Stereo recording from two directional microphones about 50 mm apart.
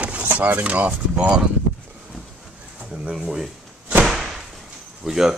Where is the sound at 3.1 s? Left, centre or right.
Centre.